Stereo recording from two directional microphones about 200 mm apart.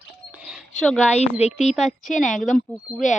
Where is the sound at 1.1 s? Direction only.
30° left (ahead or behind).